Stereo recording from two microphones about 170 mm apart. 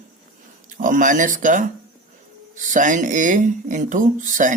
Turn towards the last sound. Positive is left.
turn(degrees=-50)  # may be behind; listen again after turning